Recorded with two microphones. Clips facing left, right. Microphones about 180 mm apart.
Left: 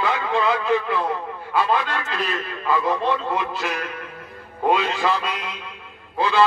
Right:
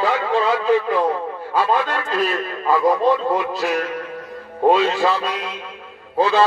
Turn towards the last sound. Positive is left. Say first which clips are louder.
# right 3 dB
turn(degrees=-40)  # may be behind; listen again after turning